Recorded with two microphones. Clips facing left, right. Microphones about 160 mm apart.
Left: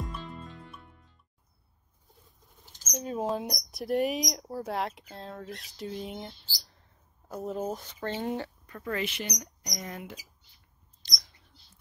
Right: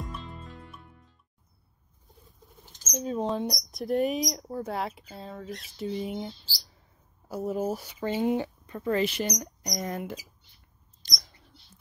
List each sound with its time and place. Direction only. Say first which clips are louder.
0.0 s music: left 1 dB; centre (ahead or behind)
2.0 s rodents: right 5 dB; centre (ahead or behind)
2.9 s speech: right 2 dB; centre (ahead or behind); by 9.0 s 25° right (ahead or behind)
9.0 s speech: right 6 dB; 40° right (ahead or behind)
11.0 s mouse: right 2 dB; 45° right (ahead or behind)